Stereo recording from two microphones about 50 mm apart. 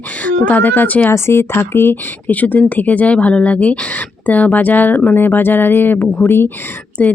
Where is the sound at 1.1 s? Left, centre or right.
Left.